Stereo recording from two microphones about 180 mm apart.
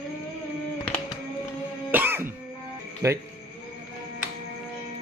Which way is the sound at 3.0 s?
15° right (ahead or behind).